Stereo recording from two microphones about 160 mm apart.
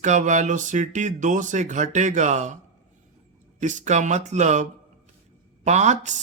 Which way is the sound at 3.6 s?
50° right (ahead or behind).